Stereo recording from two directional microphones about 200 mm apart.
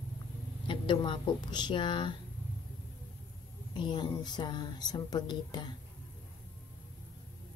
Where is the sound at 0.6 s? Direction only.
25° left (ahead or behind).